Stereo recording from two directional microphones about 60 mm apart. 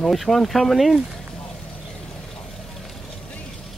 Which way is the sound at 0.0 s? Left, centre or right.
Centre.